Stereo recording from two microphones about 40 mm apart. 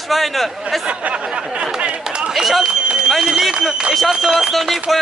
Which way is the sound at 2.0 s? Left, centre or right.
Right.